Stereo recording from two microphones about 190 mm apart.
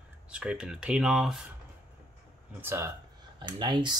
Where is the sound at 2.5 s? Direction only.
10° right (ahead or behind).